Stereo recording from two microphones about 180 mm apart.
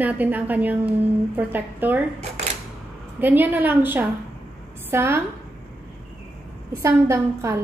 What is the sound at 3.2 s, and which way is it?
A woman's voice, 10° right (ahead or behind).